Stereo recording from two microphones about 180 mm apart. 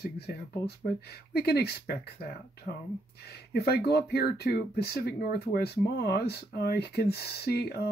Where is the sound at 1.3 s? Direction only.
60° left (ahead or behind).